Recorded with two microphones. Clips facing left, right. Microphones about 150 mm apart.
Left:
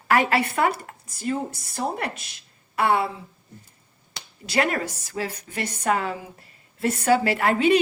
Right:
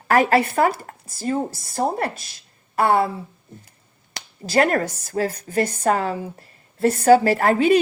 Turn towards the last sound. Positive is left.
turn(degrees=-40)  # may be behind; listen again after turning